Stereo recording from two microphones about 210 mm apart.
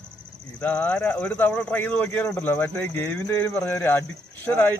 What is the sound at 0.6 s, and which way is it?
Speech, 5° left (ahead or behind).